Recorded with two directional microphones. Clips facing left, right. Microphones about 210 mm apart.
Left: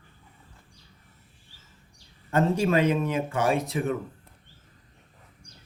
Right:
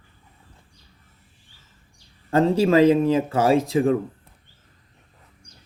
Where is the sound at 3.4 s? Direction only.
90° right.